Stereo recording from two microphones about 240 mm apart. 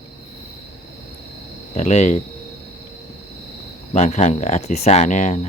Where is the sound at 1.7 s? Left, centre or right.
Left.